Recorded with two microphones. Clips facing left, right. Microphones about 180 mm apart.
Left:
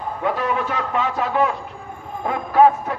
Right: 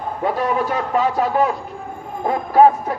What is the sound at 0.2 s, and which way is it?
A man's voice, 40° right (ahead or behind).